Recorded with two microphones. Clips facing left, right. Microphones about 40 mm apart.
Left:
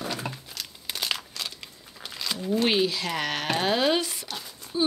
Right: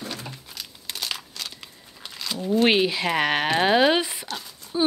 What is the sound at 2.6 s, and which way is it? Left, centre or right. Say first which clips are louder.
Speech: right 5 dB; right.